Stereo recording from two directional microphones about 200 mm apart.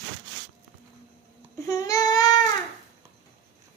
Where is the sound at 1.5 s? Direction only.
15° left (ahead or behind).